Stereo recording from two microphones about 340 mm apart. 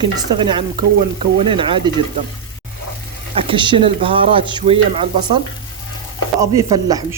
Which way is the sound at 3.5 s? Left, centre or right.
Centre.